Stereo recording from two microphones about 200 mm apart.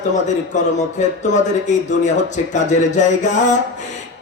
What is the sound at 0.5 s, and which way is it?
Speech, 35° left (ahead or behind).